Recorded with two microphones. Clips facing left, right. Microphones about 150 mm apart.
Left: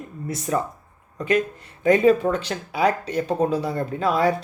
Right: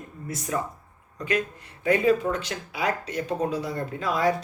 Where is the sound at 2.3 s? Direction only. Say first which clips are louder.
Left 6 dB; 35° left (ahead or behind).